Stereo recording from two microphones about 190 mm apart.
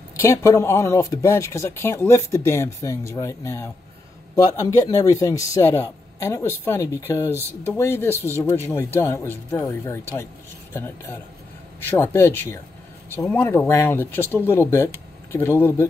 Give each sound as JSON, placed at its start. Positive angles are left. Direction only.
{"t": 0.1, "sound": "speech", "side_deg": 15}